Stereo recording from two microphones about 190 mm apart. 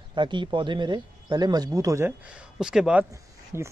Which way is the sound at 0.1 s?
25° right (ahead or behind).